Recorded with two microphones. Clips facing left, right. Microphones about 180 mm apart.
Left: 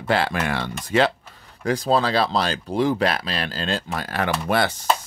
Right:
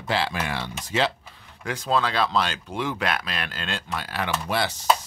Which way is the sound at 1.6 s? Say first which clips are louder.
Left 5 dB; 35° left (ahead or behind).